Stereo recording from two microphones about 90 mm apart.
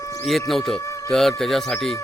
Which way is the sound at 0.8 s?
35° left (ahead or behind).